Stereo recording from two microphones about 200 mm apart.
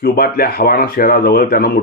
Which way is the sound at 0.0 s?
50° left (ahead or behind).